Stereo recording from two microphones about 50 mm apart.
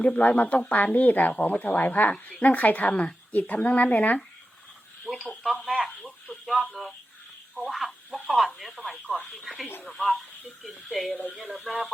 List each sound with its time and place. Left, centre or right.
0.2 s a woman's voice: left
5.2 s speech: centre
5.5 s radio: centre
7.5 s telephone: centre
9.4 s radio: centre
9.8 s speech: centre
11.4 s radio: centre